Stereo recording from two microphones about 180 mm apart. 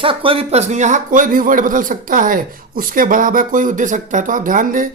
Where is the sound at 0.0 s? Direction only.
30° right (ahead or behind).